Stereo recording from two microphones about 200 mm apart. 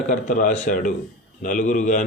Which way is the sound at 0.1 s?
40° left (ahead or behind).